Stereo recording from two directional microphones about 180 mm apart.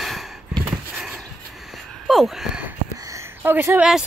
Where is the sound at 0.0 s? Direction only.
Centre (ahead or behind).